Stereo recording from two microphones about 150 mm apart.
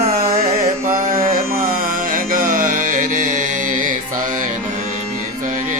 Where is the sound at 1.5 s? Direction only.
70° right (ahead or behind).